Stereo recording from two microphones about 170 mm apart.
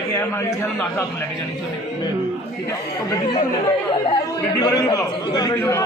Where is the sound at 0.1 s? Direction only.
15° left (ahead or behind).